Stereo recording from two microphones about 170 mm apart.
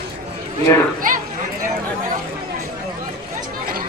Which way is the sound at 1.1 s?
50° right (ahead or behind).